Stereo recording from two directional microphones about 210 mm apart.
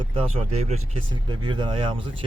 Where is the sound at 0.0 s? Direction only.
25° right (ahead or behind).